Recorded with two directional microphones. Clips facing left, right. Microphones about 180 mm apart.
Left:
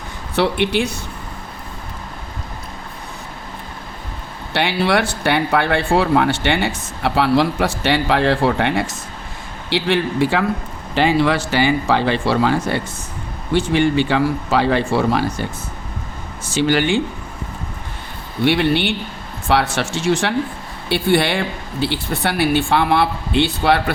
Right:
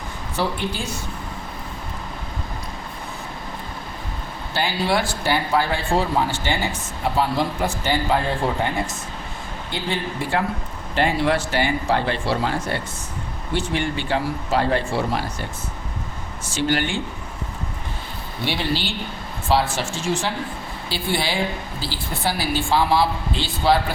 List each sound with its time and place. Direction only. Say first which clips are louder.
0.3 s speech: left 8 dB; 70° left (ahead or behind)
4.5 s speech: left 4 dB; 70° left (ahead or behind)
16.6 s speech: left 6 dB; 85° left
18.4 s speech: left 8 dB; 60° left (ahead or behind)
19.5 s speech: left 3 dB; 75° left (ahead or behind)